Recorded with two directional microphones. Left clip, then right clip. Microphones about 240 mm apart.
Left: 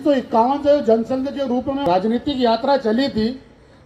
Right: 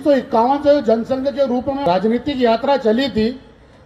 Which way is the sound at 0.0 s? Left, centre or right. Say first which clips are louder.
Right 2 dB; right.